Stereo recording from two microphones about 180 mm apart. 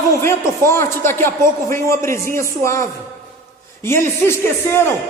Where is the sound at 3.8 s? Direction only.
15° left (ahead or behind).